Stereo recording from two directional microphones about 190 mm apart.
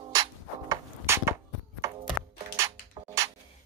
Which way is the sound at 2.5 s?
15° right (ahead or behind).